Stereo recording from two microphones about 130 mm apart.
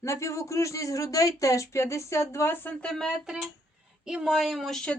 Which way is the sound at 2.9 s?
5° left (ahead or behind).